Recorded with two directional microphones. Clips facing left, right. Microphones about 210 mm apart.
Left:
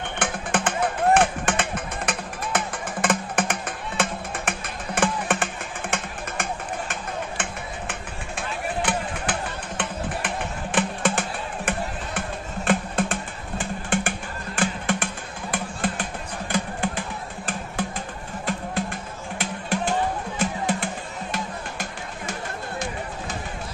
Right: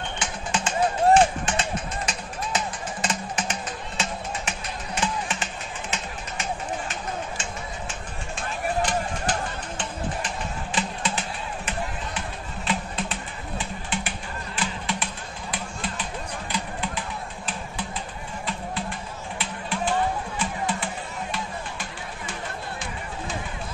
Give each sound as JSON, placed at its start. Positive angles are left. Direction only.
{"t": 0.2, "sound": "music", "side_deg": 55}
{"t": 7.9, "sound": "a sound", "side_deg": 55}
{"t": 15.5, "sound": "music", "side_deg": 50}
{"t": 18.4, "sound": "music", "side_deg": 45}